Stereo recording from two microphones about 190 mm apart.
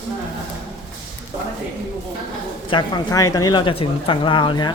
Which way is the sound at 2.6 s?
20° left (ahead or behind).